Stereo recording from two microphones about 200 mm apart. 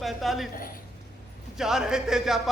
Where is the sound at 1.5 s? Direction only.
Centre (ahead or behind).